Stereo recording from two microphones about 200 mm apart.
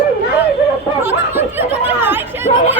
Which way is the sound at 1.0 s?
10° right (ahead or behind).